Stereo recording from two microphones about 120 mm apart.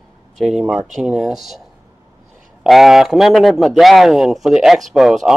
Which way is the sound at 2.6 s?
Centre (ahead or behind).